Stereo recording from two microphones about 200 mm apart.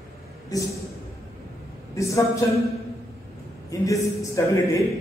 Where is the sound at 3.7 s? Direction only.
15° left (ahead or behind).